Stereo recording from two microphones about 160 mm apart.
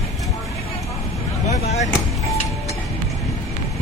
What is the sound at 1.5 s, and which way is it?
Vehicle, 45° left (ahead or behind).